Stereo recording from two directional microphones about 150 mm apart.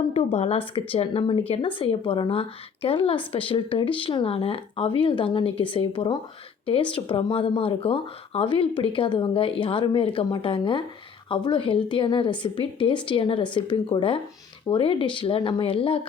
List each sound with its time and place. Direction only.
0.1 s speech: 40° left (ahead or behind)